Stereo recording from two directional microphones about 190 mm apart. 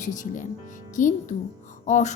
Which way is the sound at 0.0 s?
40° left (ahead or behind).